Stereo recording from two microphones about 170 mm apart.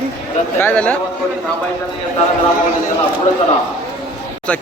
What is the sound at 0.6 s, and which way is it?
Speech, 10° left (ahead or behind).